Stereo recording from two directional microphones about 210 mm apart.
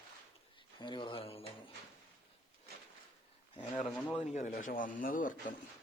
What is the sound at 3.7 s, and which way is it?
Speech, 5° left (ahead or behind).